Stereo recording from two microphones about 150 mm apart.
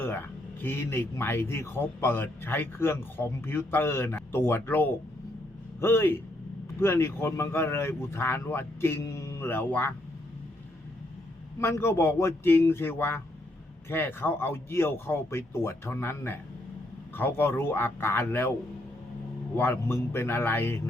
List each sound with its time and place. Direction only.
0.6 s a man's voice: 15° left (ahead or behind)
11.6 s a man's voice: 15° left (ahead or behind)
19.5 s a man's voice: 15° left (ahead or behind)